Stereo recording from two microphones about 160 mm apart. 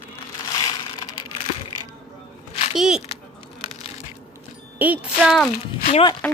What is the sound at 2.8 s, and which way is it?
Speech, 5° right (ahead or behind).